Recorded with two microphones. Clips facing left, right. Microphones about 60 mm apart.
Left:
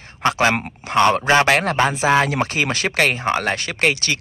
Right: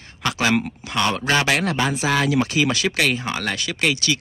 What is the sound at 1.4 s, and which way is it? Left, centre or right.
A man's voice, left.